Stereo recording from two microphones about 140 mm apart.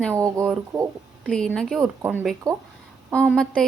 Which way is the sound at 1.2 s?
5° left (ahead or behind).